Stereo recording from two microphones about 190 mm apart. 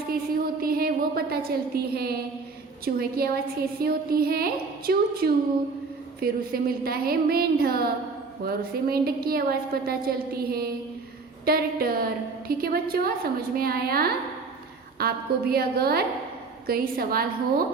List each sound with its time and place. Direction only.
0.1 s a woman's voice: 50° right (ahead or behind)